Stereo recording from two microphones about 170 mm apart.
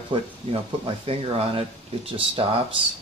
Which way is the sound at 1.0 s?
35° right (ahead or behind).